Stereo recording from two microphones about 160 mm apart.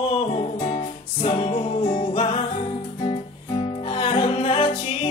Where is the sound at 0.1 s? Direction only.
40° left (ahead or behind).